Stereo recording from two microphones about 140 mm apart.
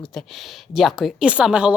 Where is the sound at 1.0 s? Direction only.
5° right (ahead or behind).